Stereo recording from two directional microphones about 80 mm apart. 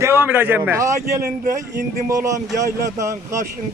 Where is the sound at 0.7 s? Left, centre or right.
Right.